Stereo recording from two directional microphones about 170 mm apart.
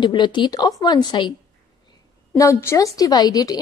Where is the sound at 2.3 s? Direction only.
15° left (ahead or behind).